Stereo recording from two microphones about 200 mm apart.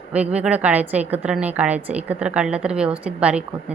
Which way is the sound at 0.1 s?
5° right (ahead or behind).